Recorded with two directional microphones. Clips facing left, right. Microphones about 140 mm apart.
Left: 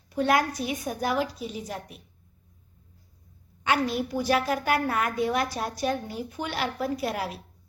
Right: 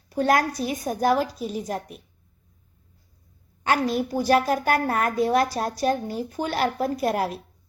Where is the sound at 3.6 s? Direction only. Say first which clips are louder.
Right 3 dB; 40° right (ahead or behind).